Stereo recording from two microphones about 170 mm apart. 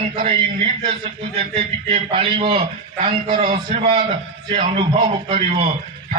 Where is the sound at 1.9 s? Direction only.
30° right (ahead or behind).